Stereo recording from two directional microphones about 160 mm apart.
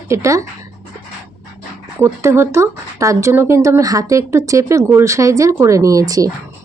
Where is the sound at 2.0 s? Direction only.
15° right (ahead or behind).